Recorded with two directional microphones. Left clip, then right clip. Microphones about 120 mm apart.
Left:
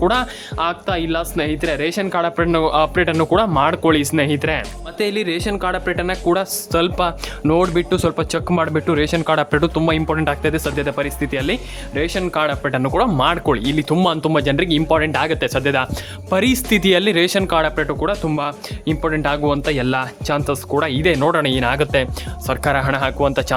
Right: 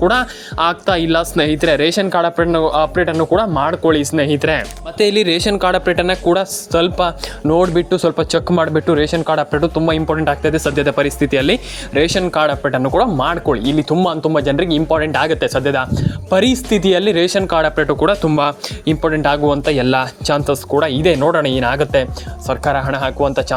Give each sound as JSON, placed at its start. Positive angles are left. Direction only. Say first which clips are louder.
{"t": 0.5, "sound": "speech", "louder": "right 6 dB", "side_deg": -30}
{"t": 2.3, "sound": "speech", "louder": "right 2 dB", "side_deg": 0}
{"t": 4.2, "sound": "speech", "louder": "right 3 dB", "side_deg": -15}
{"t": 6.2, "sound": "speech", "louder": "right 3 dB", "side_deg": -5}
{"t": 9.5, "sound": "speech", "louder": "right 1 dB", "side_deg": 15}
{"t": 9.8, "sound": "speech", "louder": "right 3 dB", "side_deg": 0}
{"t": 10.7, "sound": "speech", "louder": "right 6 dB", "side_deg": -30}
{"t": 12.3, "sound": "speech", "louder": "right 4 dB", "side_deg": -10}
{"t": 13.9, "sound": "speech", "louder": "right 1 dB", "side_deg": 15}
{"t": 17.8, "sound": "speech", "louder": "right 6 dB", "side_deg": -30}
{"t": 19.0, "sound": "speech", "louder": "right 4 dB", "side_deg": -15}
{"t": 19.4, "sound": "speech", "louder": "right 4 dB", "side_deg": -5}
{"t": 19.7, "sound": "speech", "louder": "right 5 dB", "side_deg": -20}
{"t": 20.5, "sound": "speech", "louder": "right 4 dB", "side_deg": -5}